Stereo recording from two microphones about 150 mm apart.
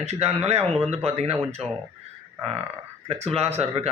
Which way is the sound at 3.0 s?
45° right (ahead or behind).